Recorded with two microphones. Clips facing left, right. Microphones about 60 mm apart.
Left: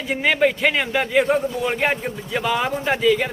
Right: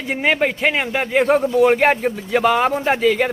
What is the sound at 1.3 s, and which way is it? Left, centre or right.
Speech, right.